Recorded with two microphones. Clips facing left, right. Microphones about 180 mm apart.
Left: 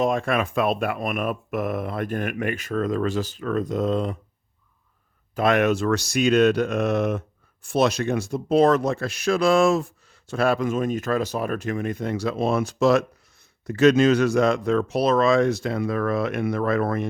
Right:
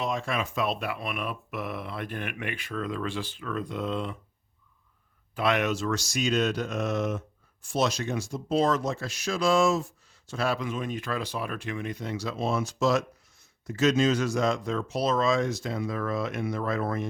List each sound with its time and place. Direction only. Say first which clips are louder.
0.0 s speech: left 8 dB; 55° left (ahead or behind)
5.3 s speech: left 6 dB; 45° left (ahead or behind); by 17.1 s 65° left (ahead or behind)